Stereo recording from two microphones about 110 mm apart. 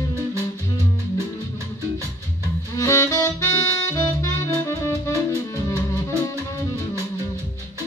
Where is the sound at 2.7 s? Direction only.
25° left (ahead or behind).